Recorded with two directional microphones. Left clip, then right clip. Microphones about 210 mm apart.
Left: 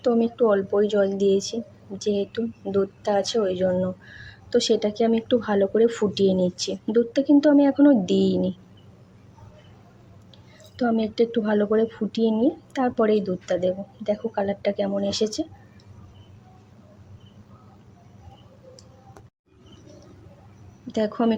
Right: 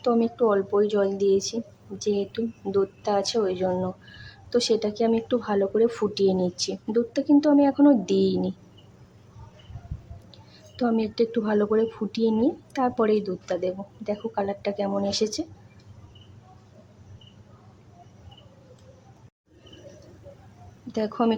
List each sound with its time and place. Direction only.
0.0 s speech: centre (ahead or behind)
10.8 s speech: centre (ahead or behind)
20.9 s speech: centre (ahead or behind)